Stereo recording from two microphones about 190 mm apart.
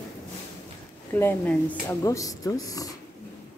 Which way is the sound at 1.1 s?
10° left (ahead or behind).